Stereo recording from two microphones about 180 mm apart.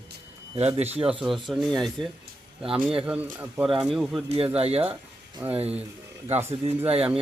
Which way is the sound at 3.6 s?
5° right (ahead or behind).